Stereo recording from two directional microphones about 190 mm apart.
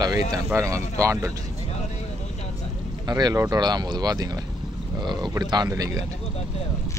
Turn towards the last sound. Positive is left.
turn(degrees=-15)  # may be behind; listen again after turning